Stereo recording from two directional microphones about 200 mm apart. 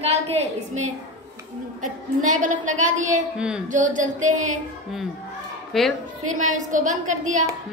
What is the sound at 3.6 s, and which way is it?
Music, 40° right (ahead or behind).